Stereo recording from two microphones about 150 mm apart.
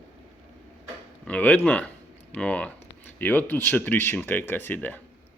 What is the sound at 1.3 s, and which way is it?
Speech, 10° left (ahead or behind).